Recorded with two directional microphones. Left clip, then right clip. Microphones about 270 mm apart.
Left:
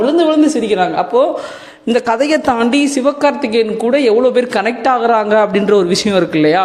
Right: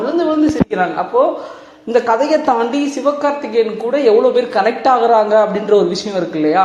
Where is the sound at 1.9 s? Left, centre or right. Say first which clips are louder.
Even; left.